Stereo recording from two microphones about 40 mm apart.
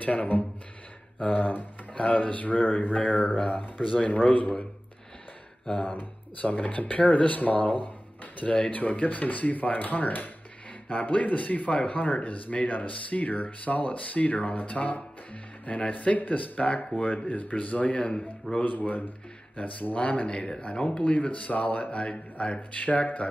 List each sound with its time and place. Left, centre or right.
0.0 s speech: left
1.2 s speech: left
2.0 s speech: left
5.7 s speech: left
18.9 s speech: left
20.2 s speech: left